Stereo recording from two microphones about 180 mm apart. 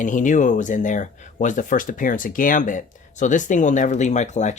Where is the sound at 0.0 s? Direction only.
45° left (ahead or behind).